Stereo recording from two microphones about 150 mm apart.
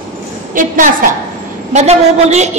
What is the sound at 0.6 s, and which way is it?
Speech, 65° right (ahead or behind).